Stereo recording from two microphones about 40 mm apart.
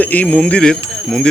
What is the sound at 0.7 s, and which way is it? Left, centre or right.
Jingle bell, centre.